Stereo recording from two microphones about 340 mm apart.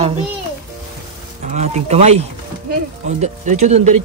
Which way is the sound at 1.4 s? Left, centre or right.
Centre.